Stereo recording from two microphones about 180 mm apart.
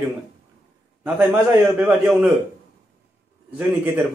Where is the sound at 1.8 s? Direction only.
10° right (ahead or behind).